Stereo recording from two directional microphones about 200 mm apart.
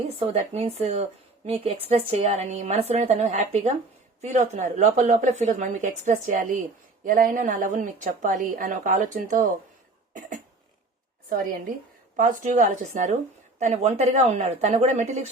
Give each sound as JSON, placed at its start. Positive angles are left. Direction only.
{"t": 0.3, "sound": "a woman's voice", "side_deg": -30}
{"t": 12.1, "sound": "a woman's voice", "side_deg": -40}